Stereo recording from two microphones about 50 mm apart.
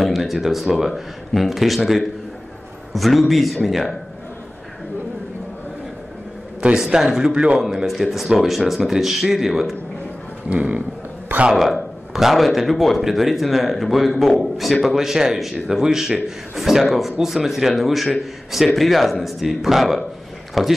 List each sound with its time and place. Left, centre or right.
0.0 s speech: centre
2.9 s speech: centre
6.8 s a man's voice: centre
10.5 s a sound: right
11.5 s speech: centre